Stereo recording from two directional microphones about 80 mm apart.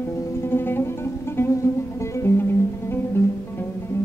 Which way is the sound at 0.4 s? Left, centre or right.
Left.